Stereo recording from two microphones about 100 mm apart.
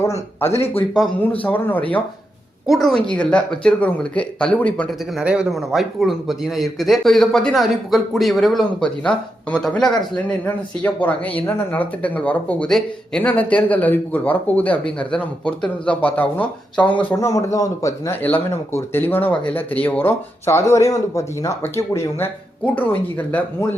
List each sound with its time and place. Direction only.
0.0 s a sound: 25° left (ahead or behind)
1.4 s speech: 15° left (ahead or behind)
2.6 s speech: centre (ahead or behind)
3.1 s speech: 10° left (ahead or behind)
5.2 s speech: 10° right (ahead or behind)
8.8 s speech: 10° left (ahead or behind)
10.2 s speech: 15° left (ahead or behind)
17.2 s a man's voice: 30° left (ahead or behind)
18.1 s speech: 20° left (ahead or behind)
22.6 s speech: 15° left (ahead or behind)